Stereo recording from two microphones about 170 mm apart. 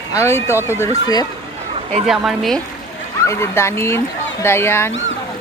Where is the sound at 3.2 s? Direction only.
15° left (ahead or behind).